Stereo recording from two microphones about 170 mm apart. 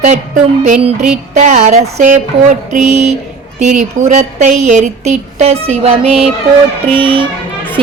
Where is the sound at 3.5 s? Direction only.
45° right (ahead or behind).